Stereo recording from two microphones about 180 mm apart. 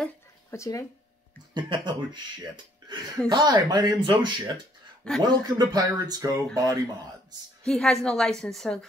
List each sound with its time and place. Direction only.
0.5 s speech: 15° left (ahead or behind)
1.5 s speech: 25° right (ahead or behind)
7.6 s a woman's voice: 5° left (ahead or behind)